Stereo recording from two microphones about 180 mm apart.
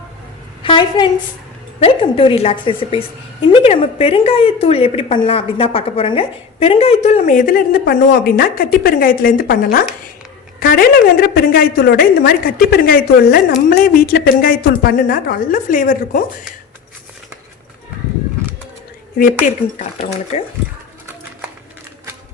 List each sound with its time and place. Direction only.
0.6 s a sound: 25° left (ahead or behind)
1.8 s a woman's voice: 30° left (ahead or behind); by 16.2 s 45° left (ahead or behind)
20.3 s a woman's voice: 35° left (ahead or behind)